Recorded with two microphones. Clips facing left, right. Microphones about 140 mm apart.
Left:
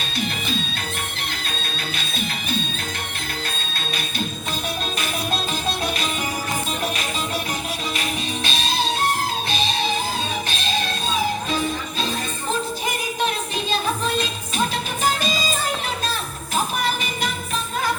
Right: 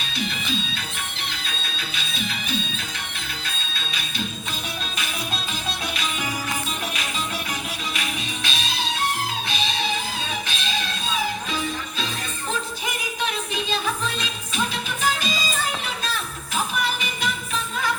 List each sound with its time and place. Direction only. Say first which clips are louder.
0.2 s music: left 2 dB; 45° left (ahead or behind)
2.0 s music: left 2 dB; 50° left (ahead or behind)
8.4 s music: left 5 dB; 35° left (ahead or behind)
12.9 s music: left 2 dB; 40° left (ahead or behind)